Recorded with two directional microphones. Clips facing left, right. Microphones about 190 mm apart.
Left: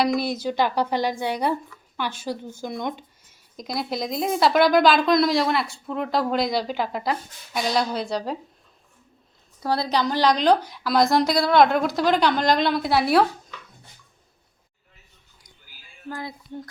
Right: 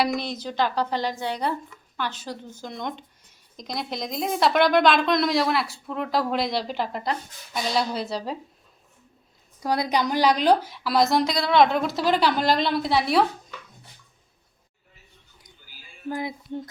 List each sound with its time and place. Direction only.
0.2 s a woman's voice: 10° left (ahead or behind)
7.8 s a woman's voice: 5° right (ahead or behind)
9.6 s a woman's voice: 15° right (ahead or behind); by 13.2 s 5° left (ahead or behind)
16.0 s speech: 20° right (ahead or behind)